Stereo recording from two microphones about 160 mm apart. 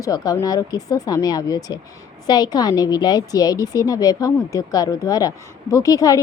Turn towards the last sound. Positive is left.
turn(degrees=20)  # may be behind; listen again after turning